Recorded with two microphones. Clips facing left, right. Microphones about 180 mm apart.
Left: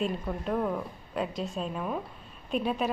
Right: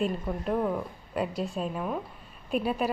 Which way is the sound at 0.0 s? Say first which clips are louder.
Right 2 dB; 5° right (ahead or behind).